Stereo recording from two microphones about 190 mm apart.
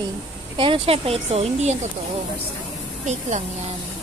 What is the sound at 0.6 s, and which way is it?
Speech, 30° right (ahead or behind).